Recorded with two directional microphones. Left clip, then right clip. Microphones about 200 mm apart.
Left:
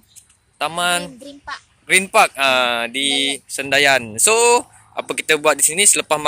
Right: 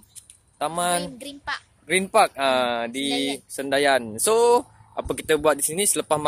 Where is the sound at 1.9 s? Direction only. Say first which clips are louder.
Left 5 dB; 5° right (ahead or behind).